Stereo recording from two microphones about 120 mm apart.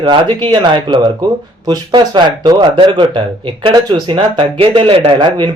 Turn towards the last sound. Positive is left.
turn(degrees=-45)  # may be behind; listen again after turning